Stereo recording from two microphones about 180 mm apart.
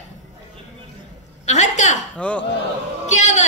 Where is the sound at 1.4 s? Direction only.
40° left (ahead or behind).